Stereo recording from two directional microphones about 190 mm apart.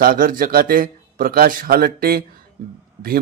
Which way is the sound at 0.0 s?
50° right (ahead or behind).